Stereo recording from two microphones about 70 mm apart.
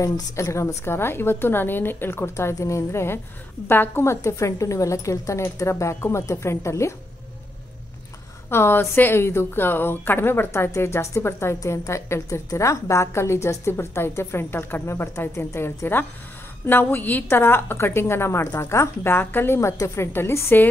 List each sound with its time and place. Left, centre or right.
0.0 s a woman's voice: left
8.5 s a woman's voice: left